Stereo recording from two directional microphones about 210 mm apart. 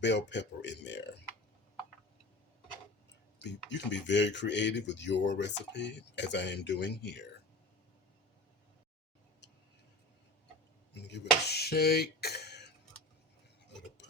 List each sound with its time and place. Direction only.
0.0 s speech: 55° left (ahead or behind)
3.4 s speech: 55° left (ahead or behind)
10.9 s speech: 55° left (ahead or behind)
14.0 s a sound: 55° left (ahead or behind)